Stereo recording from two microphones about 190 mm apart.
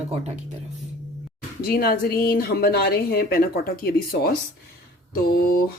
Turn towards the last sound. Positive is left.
turn(degrees=50)  # may be behind; listen again after turning